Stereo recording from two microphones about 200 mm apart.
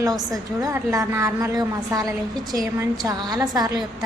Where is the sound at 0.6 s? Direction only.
15° right (ahead or behind).